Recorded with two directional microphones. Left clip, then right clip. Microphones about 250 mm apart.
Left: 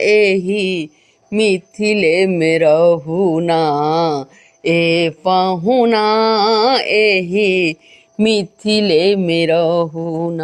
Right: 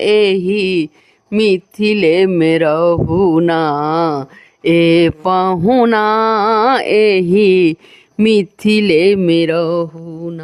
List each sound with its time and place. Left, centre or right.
0.0 s mantra: right
7.3 s speech: right
8.2 s a sound: right
9.2 s mantra: right; by 10.4 s centre